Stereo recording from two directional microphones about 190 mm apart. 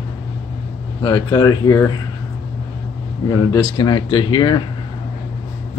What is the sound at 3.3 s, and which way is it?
Speech, 20° left (ahead or behind).